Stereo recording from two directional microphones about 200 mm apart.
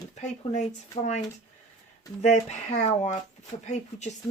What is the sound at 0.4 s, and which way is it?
Speech, 30° left (ahead or behind).